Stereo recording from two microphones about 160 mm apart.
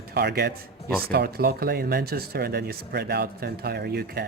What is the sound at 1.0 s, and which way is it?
Speech, 75° right (ahead or behind).